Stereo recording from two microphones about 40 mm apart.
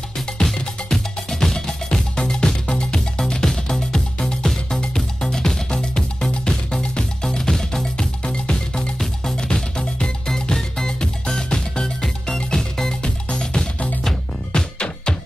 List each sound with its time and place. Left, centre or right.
0.4 s music: centre
13.0 s music: left